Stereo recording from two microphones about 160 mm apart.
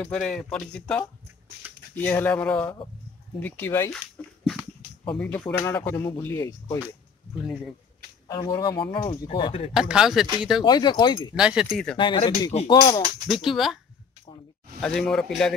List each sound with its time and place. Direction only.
0.0 s speech: 5° left (ahead or behind)
4.5 s a sound: 5° left (ahead or behind)
5.4 s speech: 25° left (ahead or behind)
8.3 s speech: 25° left (ahead or behind)
9.8 s speech: 5° right (ahead or behind)
10.6 s speech: 25° left (ahead or behind)
11.3 s speech: 5° right (ahead or behind)
12.0 s speech: 30° left (ahead or behind)
13.3 s speech: centre (ahead or behind)
14.8 s speech: 5° left (ahead or behind)